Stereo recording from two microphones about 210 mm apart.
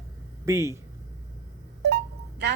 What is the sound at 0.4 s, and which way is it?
Speech, 15° right (ahead or behind).